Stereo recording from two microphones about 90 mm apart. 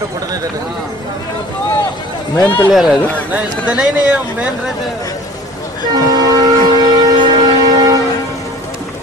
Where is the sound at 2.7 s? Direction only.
5° right (ahead or behind).